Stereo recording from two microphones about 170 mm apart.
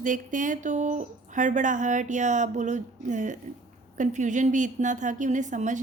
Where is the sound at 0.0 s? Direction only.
50° right (ahead or behind).